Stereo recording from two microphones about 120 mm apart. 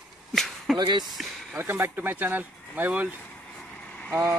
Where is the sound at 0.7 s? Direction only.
40° right (ahead or behind).